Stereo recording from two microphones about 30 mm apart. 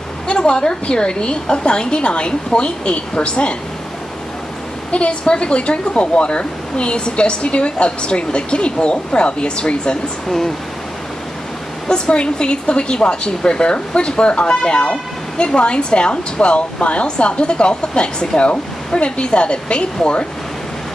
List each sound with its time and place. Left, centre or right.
0.3 s a woman's voice: left
4.9 s a woman's voice: left
11.9 s a woman's voice: left